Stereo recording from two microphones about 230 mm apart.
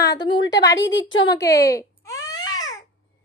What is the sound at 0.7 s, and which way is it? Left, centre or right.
Speech, left.